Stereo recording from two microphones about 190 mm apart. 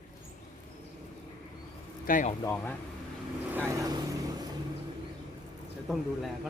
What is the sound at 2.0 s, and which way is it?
Speech, 45° left (ahead or behind).